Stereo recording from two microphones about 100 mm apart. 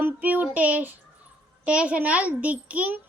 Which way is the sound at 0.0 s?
15° right (ahead or behind).